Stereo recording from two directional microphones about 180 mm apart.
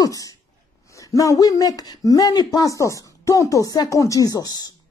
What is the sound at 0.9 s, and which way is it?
A man's voice, 20° left (ahead or behind).